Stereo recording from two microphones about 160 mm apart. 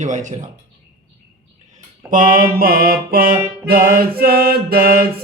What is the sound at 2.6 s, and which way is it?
Music, 65° right (ahead or behind).